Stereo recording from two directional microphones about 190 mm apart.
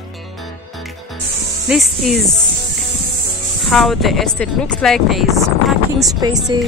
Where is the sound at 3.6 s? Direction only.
Centre (ahead or behind).